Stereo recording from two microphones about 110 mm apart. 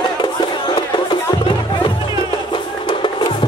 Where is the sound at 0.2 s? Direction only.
45° left (ahead or behind).